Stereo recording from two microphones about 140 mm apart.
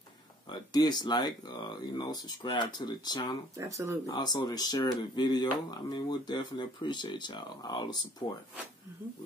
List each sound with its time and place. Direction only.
0.5 s speech: 30° left (ahead or behind)
3.5 s speech: 20° right (ahead or behind)
4.1 s speech: 30° left (ahead or behind)